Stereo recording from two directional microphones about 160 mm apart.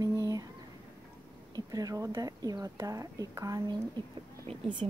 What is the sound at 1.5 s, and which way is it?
Speech, 25° right (ahead or behind).